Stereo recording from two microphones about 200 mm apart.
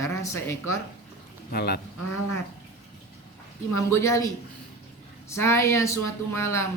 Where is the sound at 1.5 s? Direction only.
50° left (ahead or behind).